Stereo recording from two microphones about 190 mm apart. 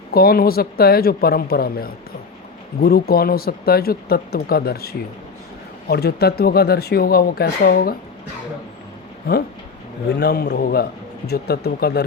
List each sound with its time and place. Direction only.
0.1 s speech: 50° left (ahead or behind)
10.1 s speech: 60° left (ahead or behind)